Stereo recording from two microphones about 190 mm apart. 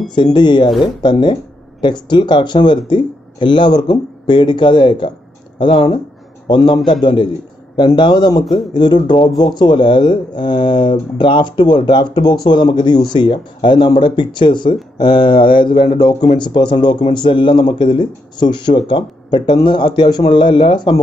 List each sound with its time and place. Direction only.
0.1 s a man's voice: 25° left (ahead or behind)